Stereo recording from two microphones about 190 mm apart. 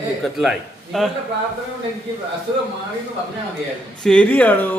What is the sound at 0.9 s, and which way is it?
Speech, centre (ahead or behind).